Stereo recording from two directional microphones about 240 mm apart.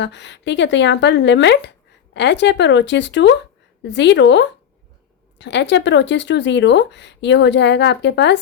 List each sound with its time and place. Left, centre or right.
0.0 s speech: left